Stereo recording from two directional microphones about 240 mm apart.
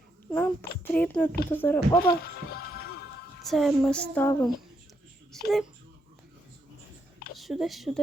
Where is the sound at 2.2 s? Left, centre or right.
Left.